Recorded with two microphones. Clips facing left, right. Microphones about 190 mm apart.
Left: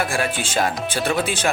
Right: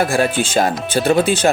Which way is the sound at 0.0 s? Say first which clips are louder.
Right 7 dB; 40° right (ahead or behind).